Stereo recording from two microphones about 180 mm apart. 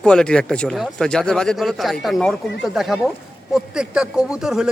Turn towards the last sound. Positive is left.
turn(degrees=-5)  # may be behind; listen again after turning